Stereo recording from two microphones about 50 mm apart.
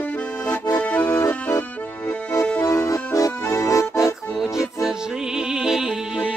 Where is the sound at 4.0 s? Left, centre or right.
Centre.